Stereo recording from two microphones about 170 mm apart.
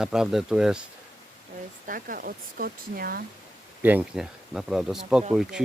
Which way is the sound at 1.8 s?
55° right (ahead or behind).